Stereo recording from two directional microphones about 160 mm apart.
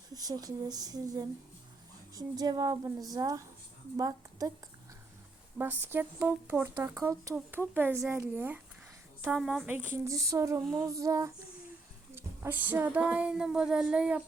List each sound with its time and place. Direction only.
0.1 s a woman's voice: 25° right (ahead or behind)
5.5 s child singing: 10° right (ahead or behind)
7.0 s a woman's voice: 20° right (ahead or behind)
7.3 s child singing: 10° right (ahead or behind)
10.8 s a woman's voice: 20° right (ahead or behind)
12.1 s child singing: 15° right (ahead or behind)